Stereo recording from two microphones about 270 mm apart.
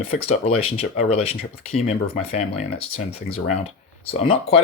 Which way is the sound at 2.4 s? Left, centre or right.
Left.